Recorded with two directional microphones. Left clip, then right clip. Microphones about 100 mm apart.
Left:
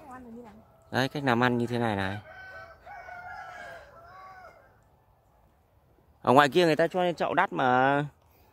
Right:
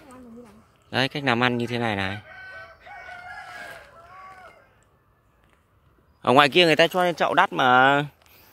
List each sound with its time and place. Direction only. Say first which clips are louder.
0.8 s speech: right 4 dB; 5° left (ahead or behind)
2.2 s chicken: right 4 dB; 25° left (ahead or behind)
2.8 s crowing: right 3 dB; 10° left (ahead or behind)
6.2 s speech: right 4 dB; 5° left (ahead or behind)